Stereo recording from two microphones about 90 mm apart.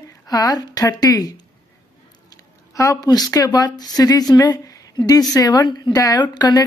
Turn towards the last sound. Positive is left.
turn(degrees=50)  # may be behind; listen again after turning